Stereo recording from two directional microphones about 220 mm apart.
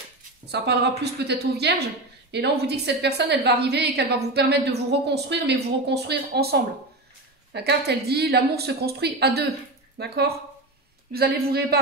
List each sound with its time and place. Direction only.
0.5 s a woman's voice: 50° right (ahead or behind)